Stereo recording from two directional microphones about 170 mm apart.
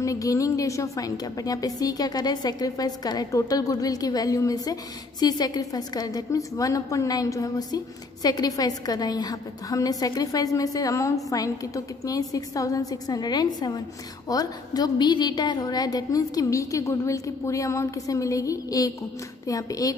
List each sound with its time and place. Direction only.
0.0 s a woman's voice: 20° left (ahead or behind)